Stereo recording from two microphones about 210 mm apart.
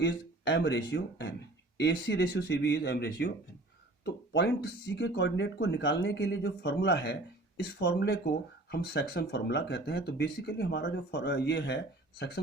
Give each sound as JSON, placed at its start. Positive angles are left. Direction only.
{"t": 0.0, "sound": "speech", "side_deg": 55}